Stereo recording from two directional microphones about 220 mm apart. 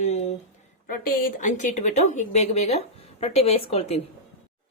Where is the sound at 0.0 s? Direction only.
35° left (ahead or behind).